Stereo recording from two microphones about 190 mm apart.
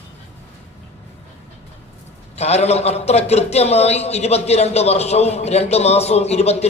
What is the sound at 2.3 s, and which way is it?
A man's voice, 35° left (ahead or behind).